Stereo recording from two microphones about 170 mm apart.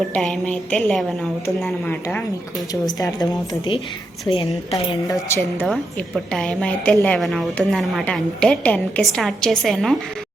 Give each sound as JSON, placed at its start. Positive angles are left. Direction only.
{"t": 0.1, "sound": "a woman's voice", "side_deg": 5}
{"t": 2.8, "sound": "a woman's voice", "side_deg": 25}
{"t": 4.3, "sound": "a woman's voice", "side_deg": 20}
{"t": 5.6, "sound": "a woman's voice", "side_deg": 0}